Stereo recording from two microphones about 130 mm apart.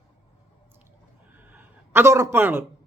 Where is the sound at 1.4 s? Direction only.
15° right (ahead or behind).